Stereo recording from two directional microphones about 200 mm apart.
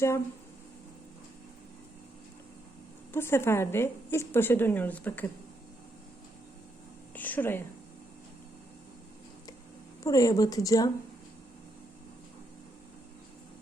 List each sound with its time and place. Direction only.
3.1 s a woman's voice: 10° left (ahead or behind)
7.1 s a woman's voice: 10° left (ahead or behind)
10.0 s a woman's voice: 15° left (ahead or behind)